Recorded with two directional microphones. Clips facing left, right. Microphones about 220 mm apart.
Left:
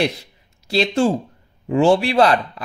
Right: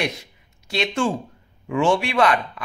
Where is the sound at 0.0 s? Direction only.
30° left (ahead or behind).